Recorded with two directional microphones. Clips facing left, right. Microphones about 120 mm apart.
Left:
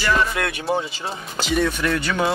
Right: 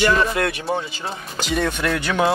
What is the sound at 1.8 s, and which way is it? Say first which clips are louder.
Speech: right 1 dB; 10° right (ahead or behind).